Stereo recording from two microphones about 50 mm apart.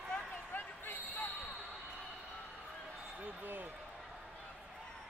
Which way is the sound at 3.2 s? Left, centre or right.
Right.